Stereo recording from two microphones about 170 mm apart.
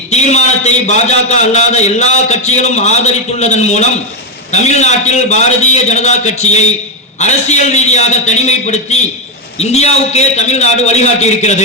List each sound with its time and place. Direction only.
0.1 s a man's voice: 40° left (ahead or behind)